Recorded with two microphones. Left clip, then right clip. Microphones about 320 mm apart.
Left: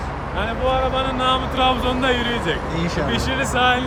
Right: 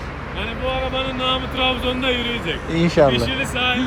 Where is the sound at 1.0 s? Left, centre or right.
Left.